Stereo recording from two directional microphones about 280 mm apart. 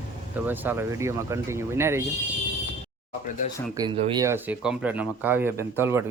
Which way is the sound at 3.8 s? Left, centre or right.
Centre.